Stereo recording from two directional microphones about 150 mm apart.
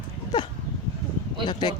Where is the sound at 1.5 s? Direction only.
30° left (ahead or behind).